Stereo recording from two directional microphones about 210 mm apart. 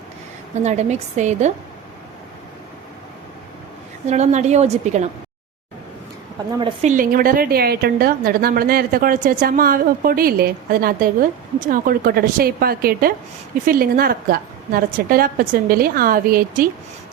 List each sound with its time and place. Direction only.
0.5 s a woman's voice: 35° right (ahead or behind)
4.0 s a woman's voice: 30° right (ahead or behind)
6.6 s a woman's voice: 25° right (ahead or behind)
6.9 s a woman's voice: 40° right (ahead or behind)